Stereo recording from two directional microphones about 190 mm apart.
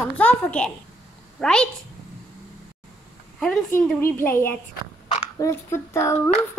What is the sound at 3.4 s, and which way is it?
A child's voice, 5° left (ahead or behind).